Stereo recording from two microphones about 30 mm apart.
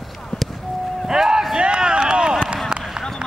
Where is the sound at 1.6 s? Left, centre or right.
Right.